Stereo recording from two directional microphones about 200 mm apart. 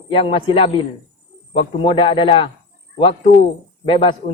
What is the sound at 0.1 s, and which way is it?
Speech, 25° left (ahead or behind).